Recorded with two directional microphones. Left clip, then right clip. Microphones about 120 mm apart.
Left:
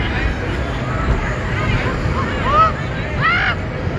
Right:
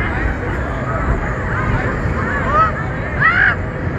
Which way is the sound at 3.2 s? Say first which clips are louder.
Right 4 dB; 35° left (ahead or behind).